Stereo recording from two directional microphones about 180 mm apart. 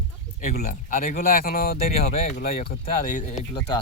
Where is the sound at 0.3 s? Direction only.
50° left (ahead or behind).